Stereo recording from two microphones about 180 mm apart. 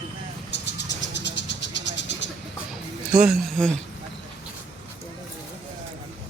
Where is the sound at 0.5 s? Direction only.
75° left (ahead or behind).